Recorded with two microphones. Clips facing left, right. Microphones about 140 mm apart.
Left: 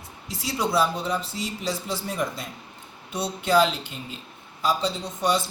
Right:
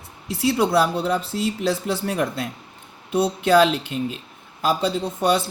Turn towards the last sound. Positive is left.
turn(degrees=-60)  # may be behind; listen again after turning